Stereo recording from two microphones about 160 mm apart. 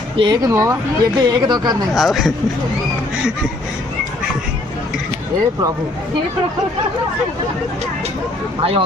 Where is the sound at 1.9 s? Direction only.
Centre (ahead or behind).